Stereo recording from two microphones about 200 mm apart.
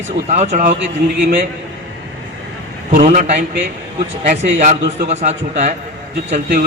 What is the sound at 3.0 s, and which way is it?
A man's voice, 35° right (ahead or behind).